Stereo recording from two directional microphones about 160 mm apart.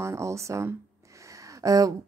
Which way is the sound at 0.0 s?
15° right (ahead or behind).